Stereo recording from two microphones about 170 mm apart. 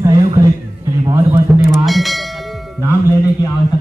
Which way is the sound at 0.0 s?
20° right (ahead or behind).